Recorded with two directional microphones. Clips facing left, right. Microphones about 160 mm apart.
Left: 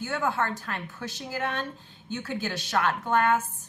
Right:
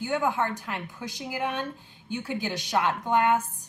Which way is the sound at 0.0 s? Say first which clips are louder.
Right 2 dB; 15° right (ahead or behind).